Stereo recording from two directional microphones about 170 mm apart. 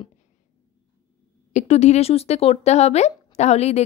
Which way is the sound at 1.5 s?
40° left (ahead or behind).